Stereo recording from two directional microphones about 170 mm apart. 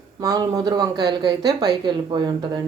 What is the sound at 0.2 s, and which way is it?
Speech, 20° right (ahead or behind).